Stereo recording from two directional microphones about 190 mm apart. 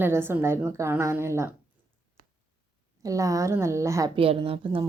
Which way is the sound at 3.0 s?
15° right (ahead or behind).